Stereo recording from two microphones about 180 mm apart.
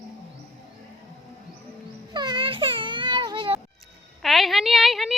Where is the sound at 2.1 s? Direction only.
25° right (ahead or behind).